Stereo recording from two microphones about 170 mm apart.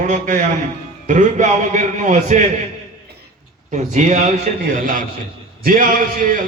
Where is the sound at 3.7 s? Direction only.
45° right (ahead or behind).